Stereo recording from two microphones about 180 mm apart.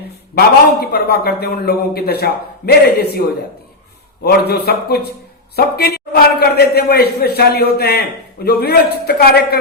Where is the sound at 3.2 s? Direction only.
50° left (ahead or behind).